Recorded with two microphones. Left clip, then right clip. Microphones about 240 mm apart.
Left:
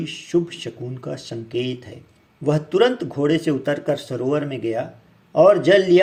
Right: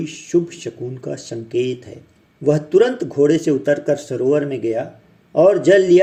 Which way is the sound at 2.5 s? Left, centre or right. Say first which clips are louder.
Right 3 dB; centre.